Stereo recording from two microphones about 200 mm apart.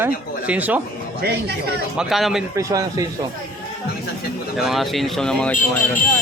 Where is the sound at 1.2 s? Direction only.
50° right (ahead or behind).